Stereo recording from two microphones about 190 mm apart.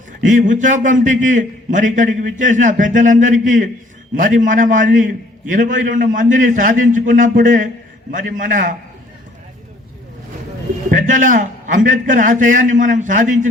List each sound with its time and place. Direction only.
0.3 s a man's voice: 40° right (ahead or behind)
10.9 s a man's voice: 45° right (ahead or behind)